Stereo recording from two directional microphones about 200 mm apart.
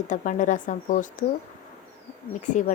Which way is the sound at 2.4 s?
40° left (ahead or behind).